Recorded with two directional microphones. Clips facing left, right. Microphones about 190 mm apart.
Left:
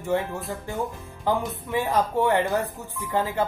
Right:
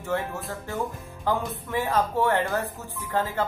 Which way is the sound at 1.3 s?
15° left (ahead or behind).